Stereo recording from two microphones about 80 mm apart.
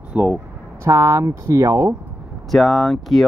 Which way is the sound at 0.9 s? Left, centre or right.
Right.